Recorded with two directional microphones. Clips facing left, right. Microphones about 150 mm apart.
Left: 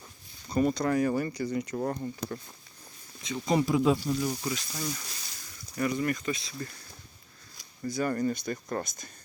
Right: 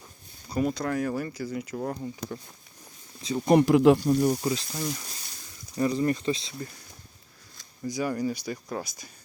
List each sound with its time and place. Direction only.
0.4 s speech: 5° right (ahead or behind)
3.2 s speech: 35° right (ahead or behind)
3.4 s speech: 60° right (ahead or behind)
4.4 s speech: 30° right (ahead or behind)
4.7 s speech: 15° right (ahead or behind)
5.7 s speech: 30° right (ahead or behind)
7.9 s speech: 10° right (ahead or behind)